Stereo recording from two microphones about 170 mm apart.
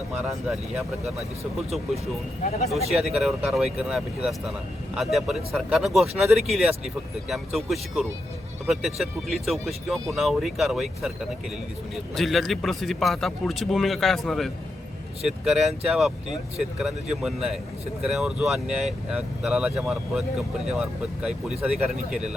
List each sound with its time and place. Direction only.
0.2 s speech: 5° right (ahead or behind)
2.4 s speech: 40° left (ahead or behind)
2.6 s speech: centre (ahead or behind)